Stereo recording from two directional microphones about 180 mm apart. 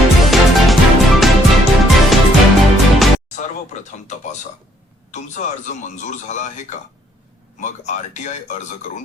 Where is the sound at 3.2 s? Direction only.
40° left (ahead or behind).